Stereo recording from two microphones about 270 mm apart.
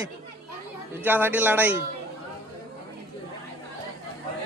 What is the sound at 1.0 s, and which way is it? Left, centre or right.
Speech, centre.